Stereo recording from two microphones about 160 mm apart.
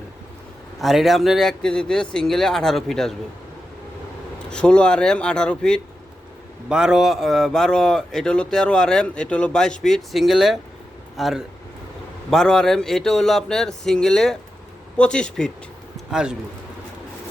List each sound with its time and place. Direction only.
0.8 s speech: centre (ahead or behind)
4.4 s speech: 5° left (ahead or behind)